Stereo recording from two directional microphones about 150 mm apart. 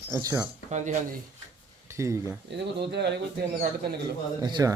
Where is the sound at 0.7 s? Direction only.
50° right (ahead or behind).